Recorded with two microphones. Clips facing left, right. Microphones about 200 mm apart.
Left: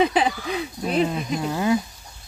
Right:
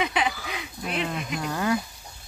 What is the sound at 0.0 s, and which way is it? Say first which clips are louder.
Speech: left 6 dB; 35° left (ahead or behind).